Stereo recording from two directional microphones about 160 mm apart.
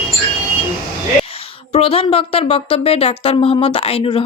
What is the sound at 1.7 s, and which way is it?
Speech, 35° left (ahead or behind).